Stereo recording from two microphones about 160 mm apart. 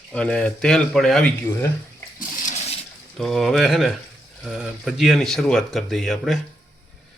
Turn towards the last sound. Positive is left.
turn(degrees=0)  # may be behind; listen again after turning